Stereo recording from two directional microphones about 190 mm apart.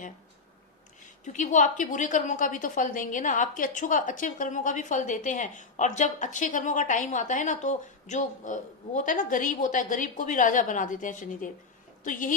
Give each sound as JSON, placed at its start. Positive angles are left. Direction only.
{"t": 1.2, "sound": "a woman's voice", "side_deg": 40}